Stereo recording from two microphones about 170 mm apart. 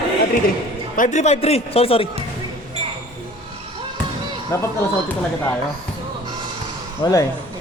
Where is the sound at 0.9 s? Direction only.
45° left (ahead or behind).